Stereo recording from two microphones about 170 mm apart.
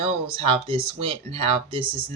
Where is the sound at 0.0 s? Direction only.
35° right (ahead or behind).